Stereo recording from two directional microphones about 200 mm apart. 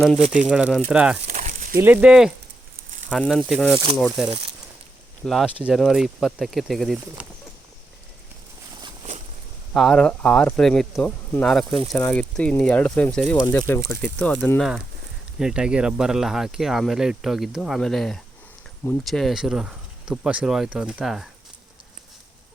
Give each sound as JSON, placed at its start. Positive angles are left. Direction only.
{"t": 0.2, "sound": "speech", "side_deg": -40}
{"t": 0.4, "sound": "speech", "side_deg": -5}
{"t": 1.2, "sound": "a sound", "side_deg": -35}
{"t": 1.8, "sound": "speech", "side_deg": -10}
{"t": 9.7, "sound": "speech", "side_deg": 0}
{"t": 15.4, "sound": "speech", "side_deg": -5}